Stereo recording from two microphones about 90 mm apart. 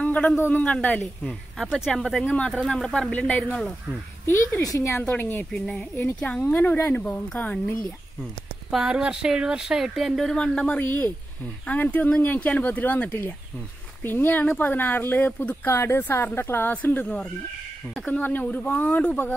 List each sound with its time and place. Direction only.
0.0 s a sound: 15° left (ahead or behind)
0.4 s speech: 15° left (ahead or behind)
4.6 s a woman's voice: 35° left (ahead or behind)
5.1 s speech: 20° left (ahead or behind)
8.2 s speech: 5° right (ahead or behind)
10.3 s speech: 10° left (ahead or behind)
10.8 s speech: 20° left (ahead or behind)